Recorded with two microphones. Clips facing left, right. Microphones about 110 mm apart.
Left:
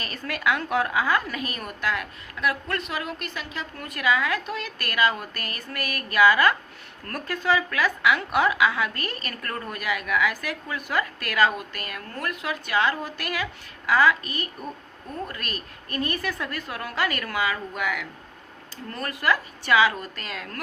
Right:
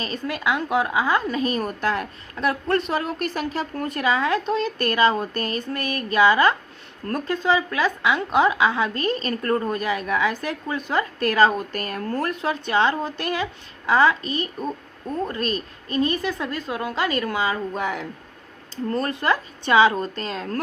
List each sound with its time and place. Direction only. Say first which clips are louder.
0.0 s a woman's voice: right 2 dB; 20° right (ahead or behind)